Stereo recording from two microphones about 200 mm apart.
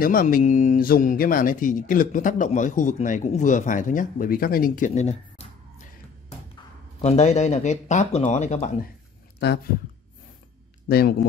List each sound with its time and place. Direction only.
0.0 s speech: 45° left (ahead or behind)
7.0 s speech: 35° left (ahead or behind)
10.9 s speech: 50° left (ahead or behind)